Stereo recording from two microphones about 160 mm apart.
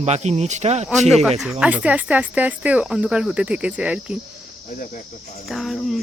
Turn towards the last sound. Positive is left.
turn(degrees=0)  # may be behind; listen again after turning